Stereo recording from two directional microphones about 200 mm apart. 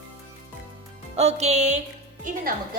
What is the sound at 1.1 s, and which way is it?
Music, 30° right (ahead or behind).